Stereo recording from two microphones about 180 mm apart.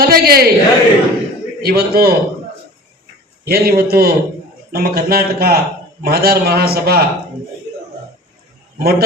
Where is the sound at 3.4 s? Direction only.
55° right (ahead or behind).